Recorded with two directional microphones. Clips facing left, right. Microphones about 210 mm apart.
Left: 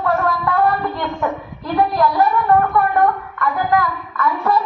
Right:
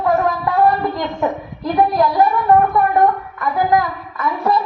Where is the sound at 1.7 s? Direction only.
20° right (ahead or behind).